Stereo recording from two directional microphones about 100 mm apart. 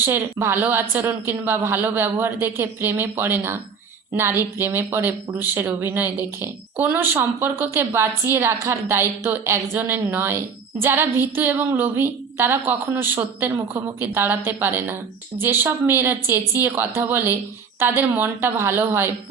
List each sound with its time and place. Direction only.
0.0 s speech: 25° right (ahead or behind)